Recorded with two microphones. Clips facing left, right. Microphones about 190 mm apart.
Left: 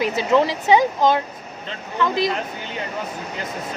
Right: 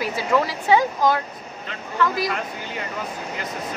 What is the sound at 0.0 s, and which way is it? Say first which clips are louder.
Speech: left 4 dB; 20° left (ahead or behind).